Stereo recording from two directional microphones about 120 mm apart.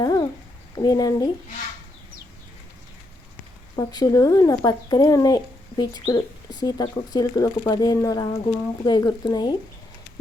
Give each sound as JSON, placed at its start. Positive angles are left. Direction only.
{"t": 0.0, "sound": "a sound", "side_deg": 35}
{"t": 0.8, "sound": "speech", "side_deg": 30}
{"t": 3.8, "sound": "speech", "side_deg": 30}